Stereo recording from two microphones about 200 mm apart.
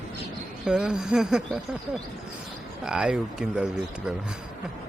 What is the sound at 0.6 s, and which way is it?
Speech, 5° right (ahead or behind).